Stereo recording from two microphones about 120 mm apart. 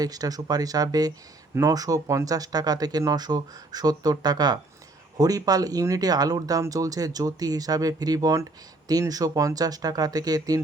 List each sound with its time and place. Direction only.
0.0 s speech: 30° right (ahead or behind)